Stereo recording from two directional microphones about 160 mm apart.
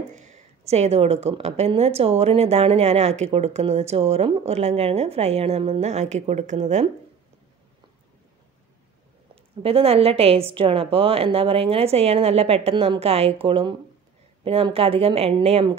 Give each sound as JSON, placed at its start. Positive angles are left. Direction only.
{"t": 0.1, "sound": "a woman's voice", "side_deg": -50}
{"t": 9.3, "sound": "a woman's voice", "side_deg": -35}